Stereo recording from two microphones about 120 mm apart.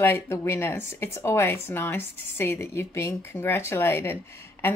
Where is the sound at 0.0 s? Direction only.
20° left (ahead or behind).